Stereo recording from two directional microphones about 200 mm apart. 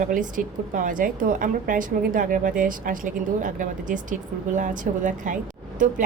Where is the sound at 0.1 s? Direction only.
40° right (ahead or behind).